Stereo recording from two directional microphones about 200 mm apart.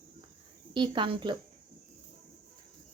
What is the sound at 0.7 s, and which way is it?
Speech, 25° right (ahead or behind).